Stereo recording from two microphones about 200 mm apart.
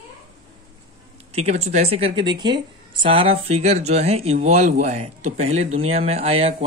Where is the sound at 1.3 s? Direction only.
30° right (ahead or behind).